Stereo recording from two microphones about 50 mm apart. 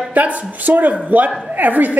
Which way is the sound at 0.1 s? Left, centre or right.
Right.